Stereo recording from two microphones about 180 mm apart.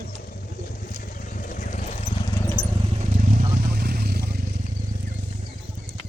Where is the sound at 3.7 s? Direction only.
60° right (ahead or behind).